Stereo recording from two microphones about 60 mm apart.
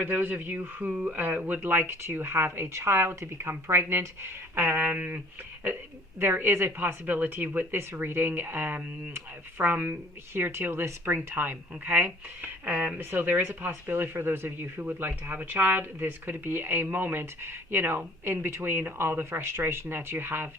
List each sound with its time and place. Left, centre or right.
0.0 s speech: right
1.6 s speech: right
6.1 s speech: right